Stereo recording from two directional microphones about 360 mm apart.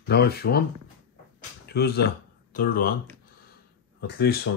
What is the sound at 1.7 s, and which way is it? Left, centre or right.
Speech, left.